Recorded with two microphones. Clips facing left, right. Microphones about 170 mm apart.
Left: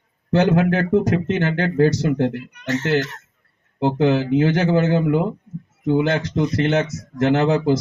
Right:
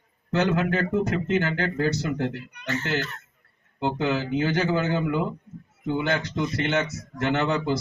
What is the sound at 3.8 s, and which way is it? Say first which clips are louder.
Speech: left 7 dB; 65° left (ahead or behind).